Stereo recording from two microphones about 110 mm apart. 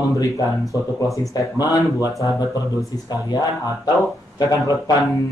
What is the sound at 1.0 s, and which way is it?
Speech, 30° left (ahead or behind).